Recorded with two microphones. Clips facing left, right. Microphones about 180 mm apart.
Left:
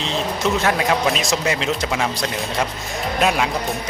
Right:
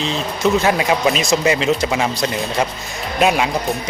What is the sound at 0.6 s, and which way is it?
A man's voice, 5° right (ahead or behind).